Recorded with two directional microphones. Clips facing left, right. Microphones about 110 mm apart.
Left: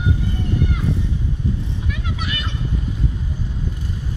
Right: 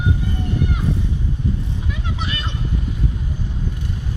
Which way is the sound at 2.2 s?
30° right (ahead or behind).